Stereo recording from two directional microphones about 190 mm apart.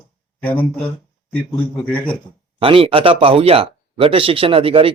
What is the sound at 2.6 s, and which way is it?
Speech, 30° right (ahead or behind).